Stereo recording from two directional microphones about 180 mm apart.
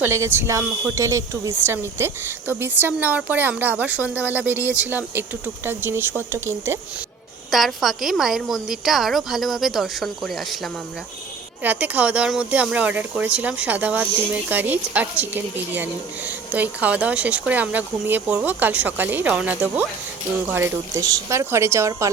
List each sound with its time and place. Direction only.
0.0 s speech: 15° right (ahead or behind)
7.5 s a woman's voice: centre (ahead or behind); by 22.1 s 15° right (ahead or behind)